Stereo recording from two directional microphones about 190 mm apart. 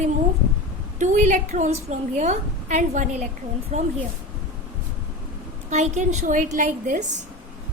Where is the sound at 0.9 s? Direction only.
40° right (ahead or behind).